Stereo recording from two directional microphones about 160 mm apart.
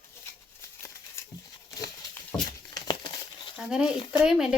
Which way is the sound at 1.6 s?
25° left (ahead or behind).